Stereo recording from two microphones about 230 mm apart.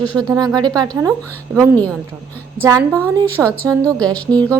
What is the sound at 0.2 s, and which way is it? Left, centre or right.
Speech, centre.